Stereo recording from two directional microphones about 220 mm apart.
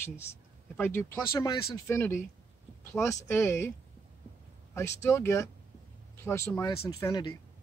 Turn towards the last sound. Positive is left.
turn(degrees=20)  # may be behind; listen again after turning